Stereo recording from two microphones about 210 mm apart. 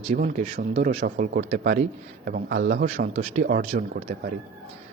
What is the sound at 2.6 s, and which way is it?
Speech, 55° right (ahead or behind).